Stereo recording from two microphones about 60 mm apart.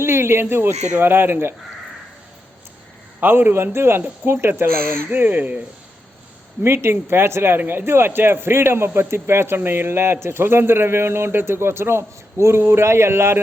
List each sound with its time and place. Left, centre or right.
0.0 s speech: right
3.2 s speech: right
6.6 s a man's voice: right